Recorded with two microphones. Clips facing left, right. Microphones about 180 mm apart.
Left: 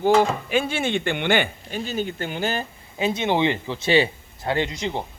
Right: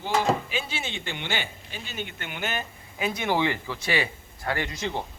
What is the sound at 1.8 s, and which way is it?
Speech, 40° left (ahead or behind).